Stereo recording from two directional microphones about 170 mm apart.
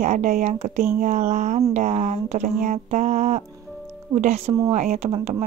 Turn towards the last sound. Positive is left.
turn(degrees=-40)  # may be behind; listen again after turning